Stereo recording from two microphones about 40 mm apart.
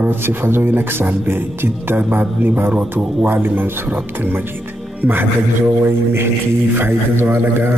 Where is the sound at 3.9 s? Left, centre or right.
Right.